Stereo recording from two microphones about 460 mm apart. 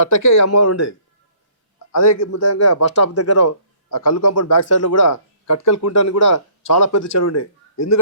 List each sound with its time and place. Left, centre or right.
0.2 s speech: left